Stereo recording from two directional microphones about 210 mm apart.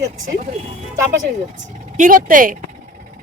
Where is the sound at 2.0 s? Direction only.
40° right (ahead or behind).